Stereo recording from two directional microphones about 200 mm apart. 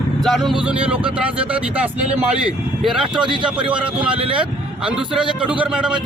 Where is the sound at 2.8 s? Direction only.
Centre (ahead or behind).